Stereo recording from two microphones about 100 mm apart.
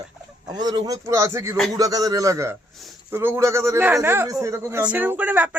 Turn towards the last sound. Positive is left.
turn(degrees=-15)  # may be behind; listen again after turning